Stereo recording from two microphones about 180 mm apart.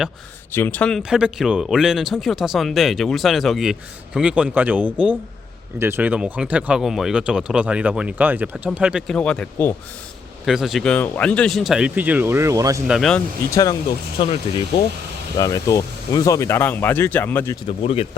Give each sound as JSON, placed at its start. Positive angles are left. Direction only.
{"t": 0.5, "sound": "speech", "side_deg": 10}
{"t": 10.4, "sound": "speech", "side_deg": 0}
{"t": 12.9, "sound": "speech", "side_deg": 0}
{"t": 14.2, "sound": "speech", "side_deg": 30}
{"t": 15.4, "sound": "speech", "side_deg": 20}
{"t": 17.7, "sound": "speech", "side_deg": 35}